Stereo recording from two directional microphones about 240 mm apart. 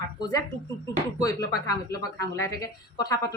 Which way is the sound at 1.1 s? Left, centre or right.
Centre.